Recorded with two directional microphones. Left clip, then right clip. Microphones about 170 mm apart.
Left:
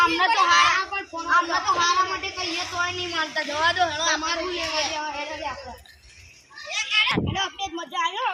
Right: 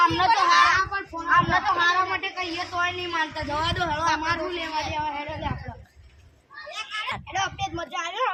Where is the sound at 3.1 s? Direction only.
80° right.